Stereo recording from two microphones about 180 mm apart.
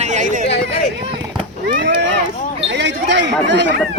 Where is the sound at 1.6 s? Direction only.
80° right.